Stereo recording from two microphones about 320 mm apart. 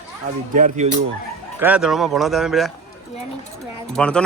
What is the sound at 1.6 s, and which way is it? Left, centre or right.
Speech, centre.